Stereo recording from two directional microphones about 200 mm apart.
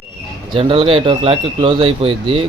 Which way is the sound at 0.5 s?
25° right (ahead or behind).